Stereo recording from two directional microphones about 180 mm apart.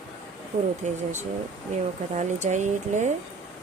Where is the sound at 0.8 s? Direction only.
40° right (ahead or behind).